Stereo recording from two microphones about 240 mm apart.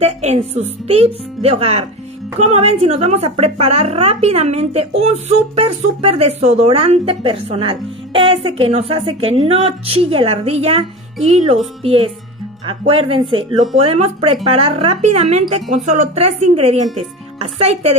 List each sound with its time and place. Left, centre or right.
0.0 s a woman's voice: right